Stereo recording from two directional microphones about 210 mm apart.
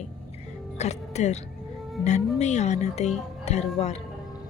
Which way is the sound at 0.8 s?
30° left (ahead or behind).